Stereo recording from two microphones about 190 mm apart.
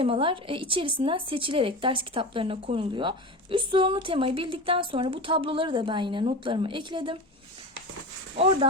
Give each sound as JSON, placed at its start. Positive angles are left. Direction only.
{"t": 0.0, "sound": "speech", "side_deg": -30}